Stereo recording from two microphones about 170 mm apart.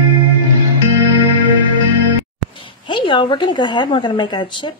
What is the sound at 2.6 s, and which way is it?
A woman's voice, 30° left (ahead or behind).